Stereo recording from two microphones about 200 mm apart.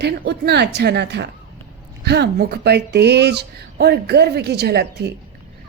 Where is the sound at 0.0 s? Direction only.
55° right (ahead or behind).